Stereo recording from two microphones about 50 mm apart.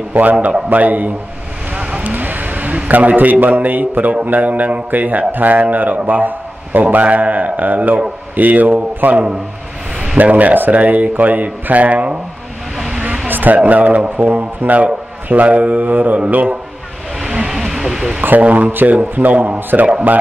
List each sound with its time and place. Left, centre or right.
0.1 s speech: right
1.8 s vehicle: right
2.1 s a man's voice: right
12.7 s vehicle: centre
13.3 s a sound: right
13.7 s speech: right
17.2 s a sound: centre
18.4 s speech: right
18.7 s speech: right